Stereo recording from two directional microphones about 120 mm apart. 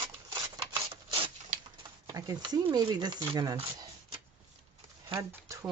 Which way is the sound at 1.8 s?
35° right (ahead or behind).